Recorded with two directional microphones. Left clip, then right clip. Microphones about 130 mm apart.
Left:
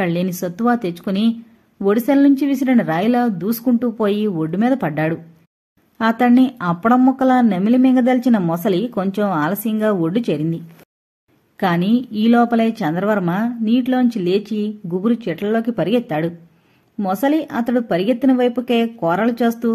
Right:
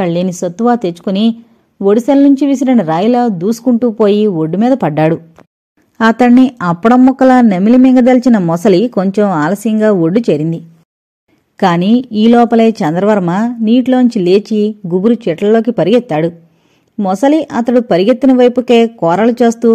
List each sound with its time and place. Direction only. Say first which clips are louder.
0.0 s speech: right 7 dB; 35° right (ahead or behind)
8.5 s a woman's voice: right 9 dB; 45° right (ahead or behind)